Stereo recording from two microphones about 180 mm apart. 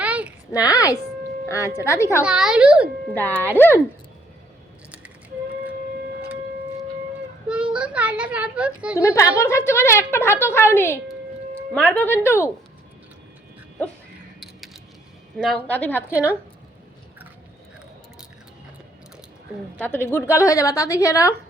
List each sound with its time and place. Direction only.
0.0 s a sound: 5° right (ahead or behind)
0.5 s a woman's voice: 20° left (ahead or behind)
2.2 s a child's voice: 5° right (ahead or behind)
3.2 s a woman's voice: 10° left (ahead or behind)
7.4 s speech: 5° right (ahead or behind)
9.0 s a woman's voice: 15° left (ahead or behind)
15.4 s a woman's voice: 5° left (ahead or behind)
16.0 s speech: 10° right (ahead or behind)
19.8 s a woman's voice: 10° left (ahead or behind)